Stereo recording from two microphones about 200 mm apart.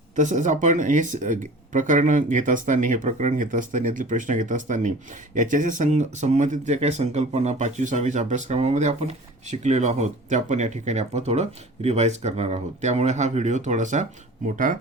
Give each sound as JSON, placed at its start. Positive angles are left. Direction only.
{"t": 0.2, "sound": "speech", "side_deg": -40}